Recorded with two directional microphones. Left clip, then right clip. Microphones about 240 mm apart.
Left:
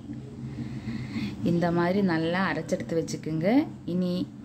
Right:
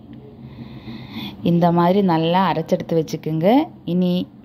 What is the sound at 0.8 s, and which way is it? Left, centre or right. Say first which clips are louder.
A woman's voice: right 4 dB; right.